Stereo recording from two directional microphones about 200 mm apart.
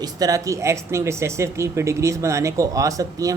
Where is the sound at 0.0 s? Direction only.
15° right (ahead or behind).